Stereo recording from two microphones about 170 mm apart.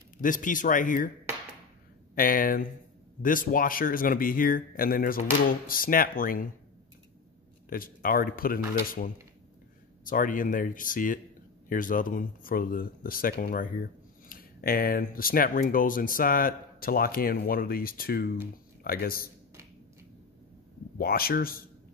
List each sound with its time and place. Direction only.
0.2 s speech: 50° left (ahead or behind)
2.1 s speech: 55° left (ahead or behind)
7.7 s speech: 55° left (ahead or behind)
21.0 s speech: 60° left (ahead or behind)